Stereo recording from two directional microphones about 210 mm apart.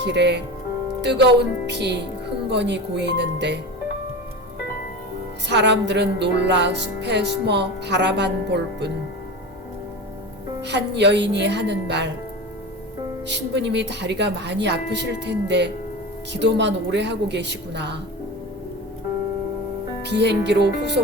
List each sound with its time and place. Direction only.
0.0 s speech: 55° right (ahead or behind)
2.5 s music: 55° right (ahead or behind)
5.5 s music: 55° right (ahead or behind)
10.6 s music: 55° right (ahead or behind)
13.2 s music: 55° right (ahead or behind)
20.0 s music: 55° right (ahead or behind)